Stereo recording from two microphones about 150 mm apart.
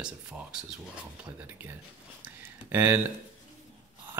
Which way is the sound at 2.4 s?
15° right (ahead or behind).